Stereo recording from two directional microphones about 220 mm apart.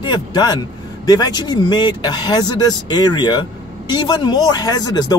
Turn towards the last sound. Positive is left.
turn(degrees=20)  # may be behind; listen again after turning